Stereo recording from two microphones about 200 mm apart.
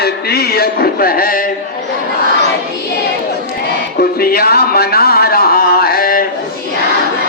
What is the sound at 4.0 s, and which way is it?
Music, 50° left (ahead or behind).